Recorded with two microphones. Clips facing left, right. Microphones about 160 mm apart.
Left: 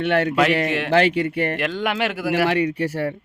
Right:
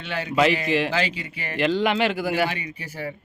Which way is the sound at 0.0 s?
65° left (ahead or behind).